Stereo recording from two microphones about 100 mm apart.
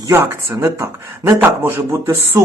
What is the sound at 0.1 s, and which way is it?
Speech, 25° right (ahead or behind).